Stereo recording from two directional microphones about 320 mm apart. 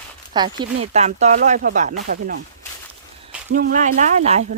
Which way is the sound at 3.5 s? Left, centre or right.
Right.